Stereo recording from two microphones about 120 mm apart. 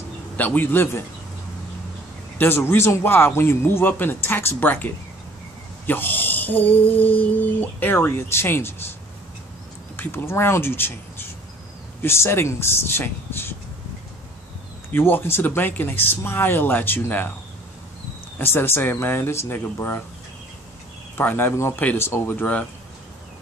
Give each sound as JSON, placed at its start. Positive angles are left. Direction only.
{"t": 0.4, "sound": "a man's voice", "side_deg": 15}
{"t": 2.3, "sound": "a man's voice", "side_deg": 20}
{"t": 9.9, "sound": "speech", "side_deg": 20}
{"t": 14.9, "sound": "a man's voice", "side_deg": 15}
{"t": 18.4, "sound": "speech", "side_deg": 20}
{"t": 21.2, "sound": "a man's voice", "side_deg": 15}